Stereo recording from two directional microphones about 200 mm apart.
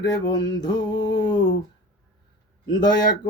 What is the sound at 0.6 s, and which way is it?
Speech, 20° left (ahead or behind).